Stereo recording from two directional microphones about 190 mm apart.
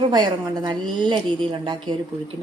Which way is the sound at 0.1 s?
20° right (ahead or behind).